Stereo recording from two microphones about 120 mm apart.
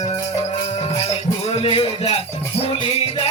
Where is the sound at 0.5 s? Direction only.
60° left (ahead or behind).